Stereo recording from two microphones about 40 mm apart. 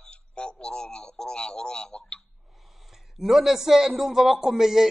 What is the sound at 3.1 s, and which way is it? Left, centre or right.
A man's voice, centre.